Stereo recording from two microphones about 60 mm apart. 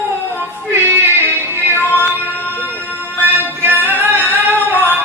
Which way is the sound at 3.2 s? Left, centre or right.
Right.